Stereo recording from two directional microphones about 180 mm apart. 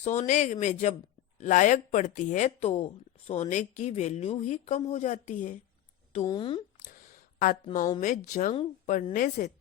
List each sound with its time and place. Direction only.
0.0 s speech: 45° left (ahead or behind)
6.2 s speech: 25° left (ahead or behind)
6.7 s a sound: 45° left (ahead or behind)
8.0 s speech: 45° left (ahead or behind)